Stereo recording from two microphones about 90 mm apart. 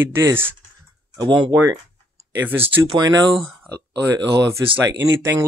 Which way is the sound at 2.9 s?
45° right (ahead or behind).